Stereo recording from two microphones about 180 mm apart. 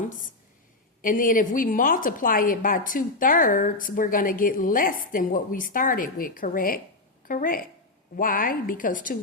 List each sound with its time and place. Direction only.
1.0 s a woman's voice: 50° left (ahead or behind)